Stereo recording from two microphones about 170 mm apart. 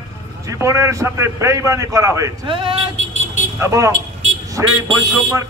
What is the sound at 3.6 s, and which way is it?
A man's voice, 20° right (ahead or behind).